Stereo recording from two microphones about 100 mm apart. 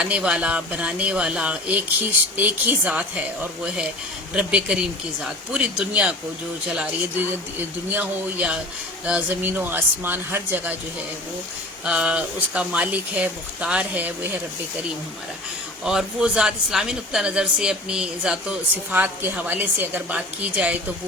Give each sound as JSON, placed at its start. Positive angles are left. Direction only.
{"t": 0.0, "sound": "speech", "side_deg": -10}
{"t": 11.9, "sound": "speech", "side_deg": -10}
{"t": 15.8, "sound": "speech", "side_deg": -5}